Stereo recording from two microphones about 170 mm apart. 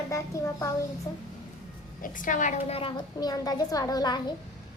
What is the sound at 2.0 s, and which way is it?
Speech, 50° left (ahead or behind).